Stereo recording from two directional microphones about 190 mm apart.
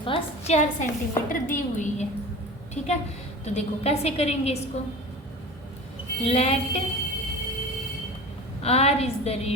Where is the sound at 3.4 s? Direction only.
35° left (ahead or behind).